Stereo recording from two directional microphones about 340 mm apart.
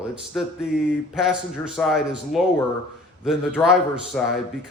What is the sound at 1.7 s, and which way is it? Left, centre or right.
A man's voice, centre.